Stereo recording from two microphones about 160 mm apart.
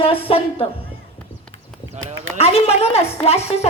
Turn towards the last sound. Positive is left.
turn(degrees=40)  # may be behind; listen again after turning